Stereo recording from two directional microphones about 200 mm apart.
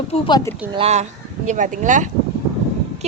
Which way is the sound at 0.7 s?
30° right (ahead or behind).